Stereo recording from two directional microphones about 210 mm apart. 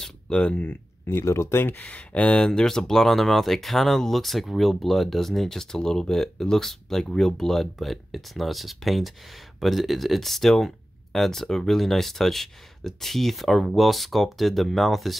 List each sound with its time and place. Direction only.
0.0 s speech: 5° left (ahead or behind)